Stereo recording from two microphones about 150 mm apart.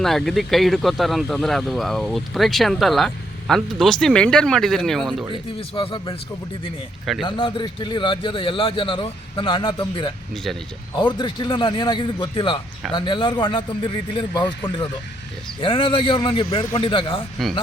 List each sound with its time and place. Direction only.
0.0 s speech: centre (ahead or behind)
5.3 s a man's voice: 35° left (ahead or behind)
7.2 s a man's voice: 35° left (ahead or behind)
15.6 s a man's voice: 35° left (ahead or behind)